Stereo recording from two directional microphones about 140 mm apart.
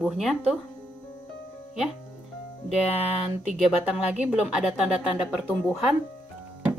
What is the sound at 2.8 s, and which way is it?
Speech, 45° left (ahead or behind).